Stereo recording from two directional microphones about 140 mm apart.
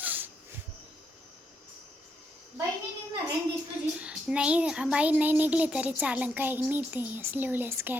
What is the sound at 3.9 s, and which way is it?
A child's voice, 5° right (ahead or behind).